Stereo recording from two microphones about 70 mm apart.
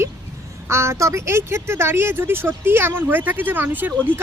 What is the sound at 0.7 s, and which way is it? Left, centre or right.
Speech, right.